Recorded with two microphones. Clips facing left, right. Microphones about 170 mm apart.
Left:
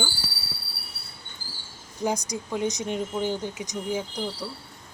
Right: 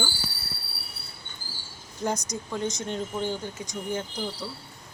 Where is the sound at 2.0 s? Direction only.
10° left (ahead or behind).